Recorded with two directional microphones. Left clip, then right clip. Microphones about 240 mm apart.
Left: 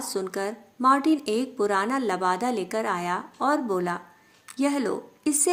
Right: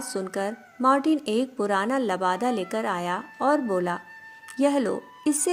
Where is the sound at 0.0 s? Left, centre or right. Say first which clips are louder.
Even; right.